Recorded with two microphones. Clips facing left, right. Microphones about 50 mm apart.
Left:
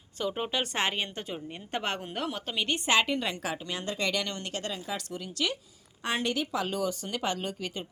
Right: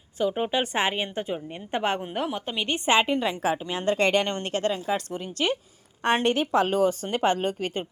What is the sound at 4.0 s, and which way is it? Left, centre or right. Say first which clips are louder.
Speech: right 7 dB; right.